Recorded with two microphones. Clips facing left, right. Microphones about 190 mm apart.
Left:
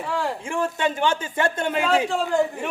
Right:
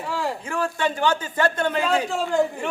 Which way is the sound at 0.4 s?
25° left (ahead or behind).